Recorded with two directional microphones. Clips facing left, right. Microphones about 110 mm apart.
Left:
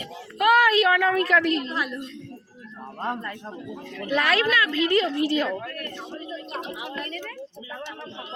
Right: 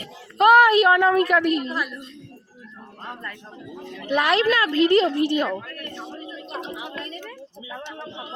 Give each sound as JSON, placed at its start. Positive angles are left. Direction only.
{"t": 0.3, "sound": "a child's voice", "side_deg": -25}
{"t": 1.7, "sound": "a woman's voice", "side_deg": 0}
{"t": 4.0, "sound": "a woman's voice", "side_deg": -25}
{"t": 5.3, "sound": "a woman's voice", "side_deg": -20}
{"t": 7.0, "sound": "a woman's voice", "side_deg": -20}